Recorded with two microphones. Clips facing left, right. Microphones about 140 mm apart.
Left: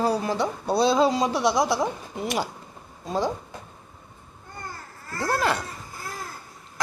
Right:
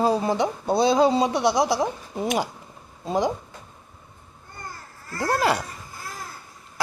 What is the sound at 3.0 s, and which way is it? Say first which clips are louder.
Speech: right 3 dB; 15° right (ahead or behind).